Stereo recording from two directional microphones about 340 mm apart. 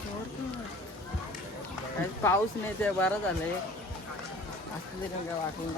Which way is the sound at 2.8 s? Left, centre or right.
Centre.